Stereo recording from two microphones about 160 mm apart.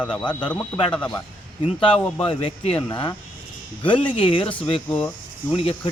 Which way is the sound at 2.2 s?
35° left (ahead or behind).